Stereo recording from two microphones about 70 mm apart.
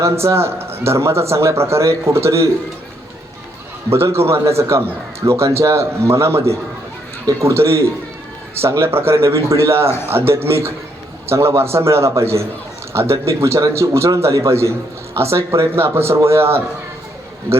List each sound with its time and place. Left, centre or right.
0.0 s a man's voice: right
3.8 s a man's voice: right